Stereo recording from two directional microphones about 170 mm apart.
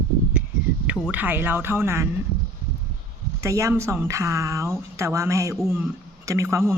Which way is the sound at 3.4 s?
15° right (ahead or behind).